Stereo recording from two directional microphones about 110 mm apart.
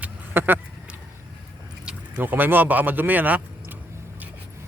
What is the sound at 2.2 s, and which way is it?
Speech, 15° right (ahead or behind).